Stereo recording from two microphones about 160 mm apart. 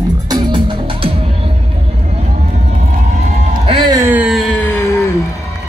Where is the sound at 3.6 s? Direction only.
25° right (ahead or behind).